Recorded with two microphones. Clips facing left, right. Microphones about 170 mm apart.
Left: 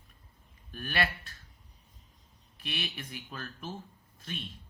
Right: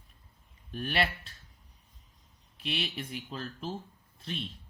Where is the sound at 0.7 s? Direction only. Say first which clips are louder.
Right 2 dB; 25° right (ahead or behind).